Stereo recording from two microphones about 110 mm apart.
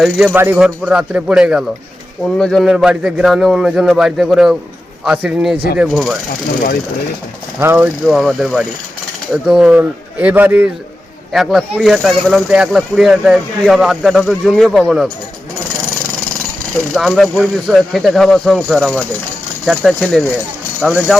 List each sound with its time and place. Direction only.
0.3 s speech: 20° right (ahead or behind)
0.6 s speech: 10° right (ahead or behind)
2.2 s speech: 5° left (ahead or behind)
2.6 s speech: 5° right (ahead or behind)
7.6 s speech: 20° right (ahead or behind)
8.0 s speech: centre (ahead or behind)
11.3 s speech: centre (ahead or behind)
16.9 s speech: centre (ahead or behind)